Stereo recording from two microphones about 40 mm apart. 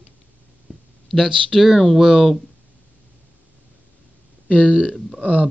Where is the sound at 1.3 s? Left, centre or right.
Centre.